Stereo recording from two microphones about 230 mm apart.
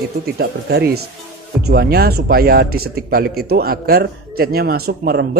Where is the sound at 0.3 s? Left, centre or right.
Right.